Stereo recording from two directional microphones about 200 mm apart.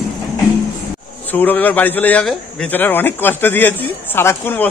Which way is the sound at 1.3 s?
10° left (ahead or behind).